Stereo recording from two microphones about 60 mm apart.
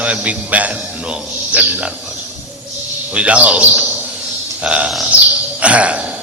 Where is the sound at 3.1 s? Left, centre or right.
Centre.